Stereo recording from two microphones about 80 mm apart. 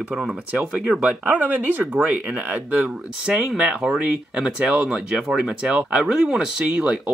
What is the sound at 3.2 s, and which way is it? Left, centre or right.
Speech, centre.